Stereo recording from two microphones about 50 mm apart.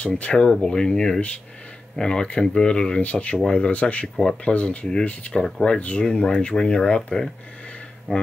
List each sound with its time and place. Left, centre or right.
0.0 s speech: left
5.3 s speech: centre
5.8 s speech: left
8.1 s speech: centre